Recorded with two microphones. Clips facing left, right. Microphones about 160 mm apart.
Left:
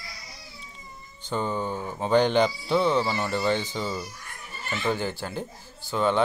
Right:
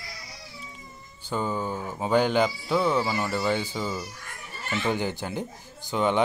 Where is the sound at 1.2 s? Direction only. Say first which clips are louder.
Even; 5° right (ahead or behind).